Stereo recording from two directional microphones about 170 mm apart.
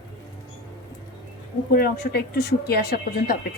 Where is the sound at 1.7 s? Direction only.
65° left (ahead or behind).